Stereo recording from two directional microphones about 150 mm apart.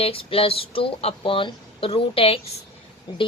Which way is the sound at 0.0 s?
40° left (ahead or behind).